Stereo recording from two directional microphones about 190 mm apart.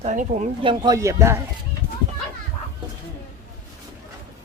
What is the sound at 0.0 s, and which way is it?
Speech, 40° right (ahead or behind).